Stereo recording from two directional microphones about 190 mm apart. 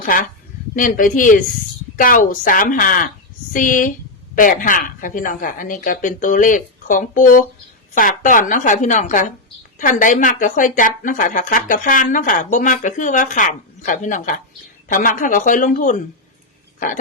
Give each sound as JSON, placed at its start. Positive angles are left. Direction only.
{"t": 0.0, "sound": "a woman's voice", "side_deg": 50}